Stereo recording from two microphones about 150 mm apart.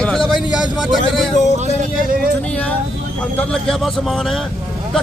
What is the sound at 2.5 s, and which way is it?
Speech, 10° left (ahead or behind).